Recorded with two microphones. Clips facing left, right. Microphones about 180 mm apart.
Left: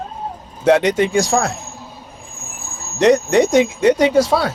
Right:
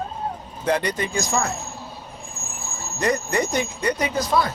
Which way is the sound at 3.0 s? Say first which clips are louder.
Left 10 dB; 90° left.